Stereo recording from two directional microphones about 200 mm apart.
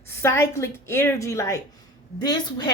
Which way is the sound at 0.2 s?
10° left (ahead or behind).